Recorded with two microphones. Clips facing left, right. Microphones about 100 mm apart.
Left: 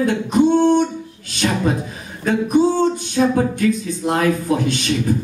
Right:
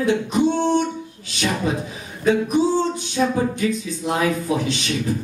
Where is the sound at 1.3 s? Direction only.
55° left (ahead or behind).